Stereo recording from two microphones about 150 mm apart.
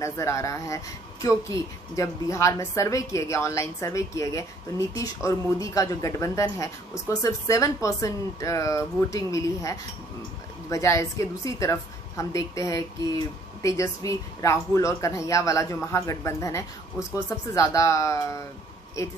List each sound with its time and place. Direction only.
0.0 s a woman's voice: 20° left (ahead or behind)